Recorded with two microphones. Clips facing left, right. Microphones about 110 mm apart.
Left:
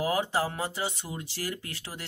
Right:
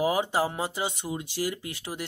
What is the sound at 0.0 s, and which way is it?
Speech, 15° right (ahead or behind).